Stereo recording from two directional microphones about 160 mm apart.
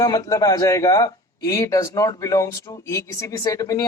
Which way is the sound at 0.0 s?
20° left (ahead or behind).